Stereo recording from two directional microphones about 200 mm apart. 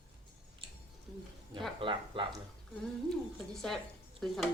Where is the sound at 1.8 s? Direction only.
25° right (ahead or behind).